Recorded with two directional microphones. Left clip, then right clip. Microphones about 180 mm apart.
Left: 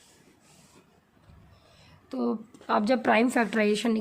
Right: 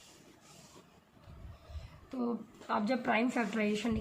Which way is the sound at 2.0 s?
55° left (ahead or behind).